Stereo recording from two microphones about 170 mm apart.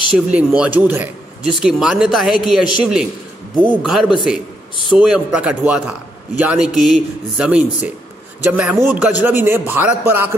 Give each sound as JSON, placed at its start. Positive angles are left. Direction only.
{"t": 0.1, "sound": "a man's voice", "side_deg": -5}